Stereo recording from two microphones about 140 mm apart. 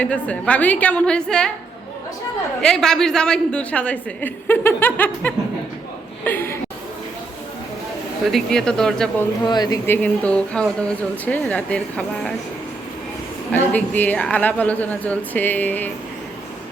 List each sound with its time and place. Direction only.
0.0 s speech: 10° left (ahead or behind)
2.6 s speech: 5° left (ahead or behind)
8.3 s speech: 5° left (ahead or behind)
9.4 s speech: 30° left (ahead or behind); by 12.3 s 10° left (ahead or behind)
13.5 s speech: 10° left (ahead or behind)